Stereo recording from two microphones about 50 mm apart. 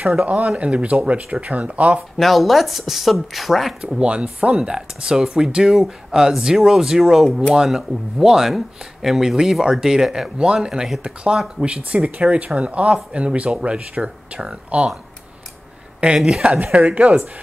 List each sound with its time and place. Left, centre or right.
0.2 s speech: right
2.1 s speech: centre
4.0 s speech: centre
11.6 s speech: right
16.0 s speech: right
17.0 s speech: right